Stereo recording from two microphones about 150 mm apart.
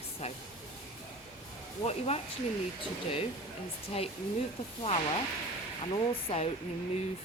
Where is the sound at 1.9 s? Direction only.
45° left (ahead or behind).